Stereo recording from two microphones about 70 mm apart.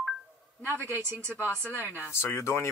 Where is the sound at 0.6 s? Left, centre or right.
Left.